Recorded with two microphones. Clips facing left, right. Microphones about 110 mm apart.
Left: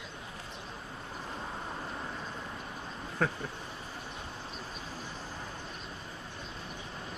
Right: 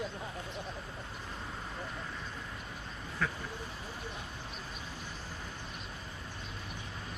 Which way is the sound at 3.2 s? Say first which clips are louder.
Left 4 dB; 45° left (ahead or behind).